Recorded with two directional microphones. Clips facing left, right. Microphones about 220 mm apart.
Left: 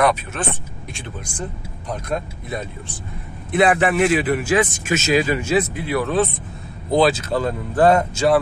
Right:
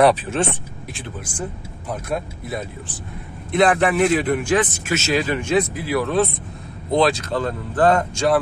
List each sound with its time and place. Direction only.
0.0 s speech: 30° right (ahead or behind)
0.9 s speech: 5° right (ahead or behind)
3.5 s speech: 5° left (ahead or behind)